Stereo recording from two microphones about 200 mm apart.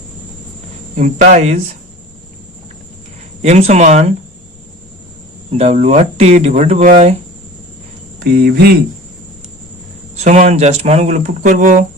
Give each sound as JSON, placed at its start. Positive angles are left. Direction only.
{"t": 0.9, "sound": "speech", "side_deg": -35}
{"t": 3.4, "sound": "speech", "side_deg": -35}
{"t": 5.5, "sound": "speech", "side_deg": -35}
{"t": 8.2, "sound": "speech", "side_deg": -50}
{"t": 10.2, "sound": "speech", "side_deg": -35}